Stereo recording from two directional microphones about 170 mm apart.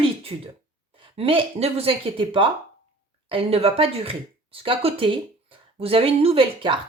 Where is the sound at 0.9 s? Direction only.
35° right (ahead or behind).